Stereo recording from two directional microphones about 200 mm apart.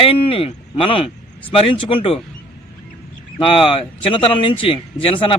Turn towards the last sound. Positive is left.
turn(degrees=25)  # may be behind; listen again after turning